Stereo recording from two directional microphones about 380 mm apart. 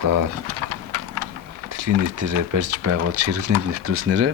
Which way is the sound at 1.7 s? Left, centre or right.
Right.